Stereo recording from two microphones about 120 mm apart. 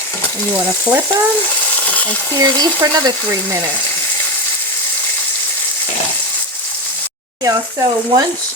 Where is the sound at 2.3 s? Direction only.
35° right (ahead or behind).